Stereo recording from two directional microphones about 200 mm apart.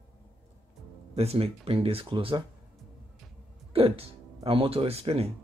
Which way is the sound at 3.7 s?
30° right (ahead or behind).